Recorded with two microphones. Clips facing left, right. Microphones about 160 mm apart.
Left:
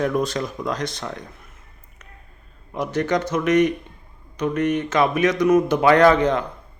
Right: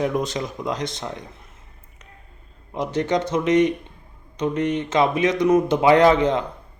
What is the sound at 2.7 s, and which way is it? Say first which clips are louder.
Speech: even; 20° right (ahead or behind).